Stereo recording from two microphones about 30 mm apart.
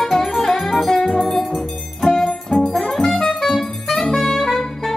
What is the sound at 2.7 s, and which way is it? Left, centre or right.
Brass instrument, centre.